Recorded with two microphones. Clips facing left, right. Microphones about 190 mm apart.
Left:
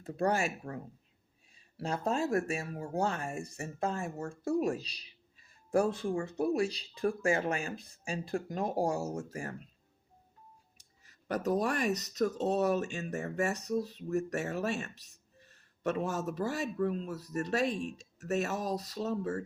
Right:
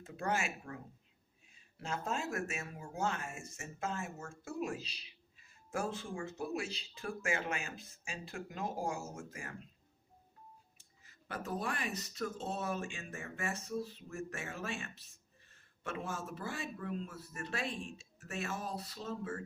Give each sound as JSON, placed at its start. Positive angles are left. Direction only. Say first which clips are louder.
{"t": 0.0, "sound": "speech", "louder": "left 6 dB", "side_deg": 35}
{"t": 11.0, "sound": "speech", "louder": "left 11 dB", "side_deg": 40}